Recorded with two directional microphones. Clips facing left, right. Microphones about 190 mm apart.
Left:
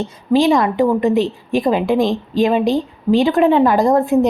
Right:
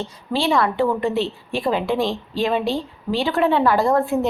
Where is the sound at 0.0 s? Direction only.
15° left (ahead or behind).